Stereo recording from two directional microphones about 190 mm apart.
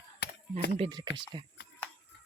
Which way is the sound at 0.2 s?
65° left (ahead or behind).